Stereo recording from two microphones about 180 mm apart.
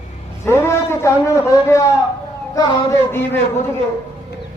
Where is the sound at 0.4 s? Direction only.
15° left (ahead or behind).